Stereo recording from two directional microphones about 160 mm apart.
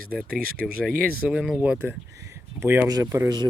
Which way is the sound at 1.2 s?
5° right (ahead or behind).